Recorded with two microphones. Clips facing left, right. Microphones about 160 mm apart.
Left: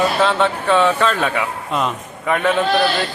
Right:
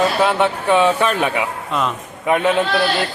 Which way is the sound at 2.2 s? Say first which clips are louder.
Right 2 dB; 15° right (ahead or behind).